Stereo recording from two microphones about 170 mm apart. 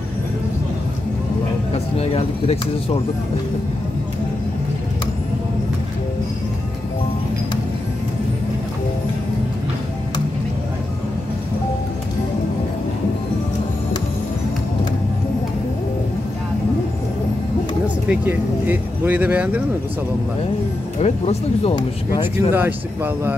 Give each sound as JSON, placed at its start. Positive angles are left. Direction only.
{"t": 1.7, "sound": "speech", "side_deg": 35}
{"t": 17.8, "sound": "speech", "side_deg": -10}
{"t": 21.0, "sound": "speech", "side_deg": 40}
{"t": 22.5, "sound": "speech", "side_deg": -10}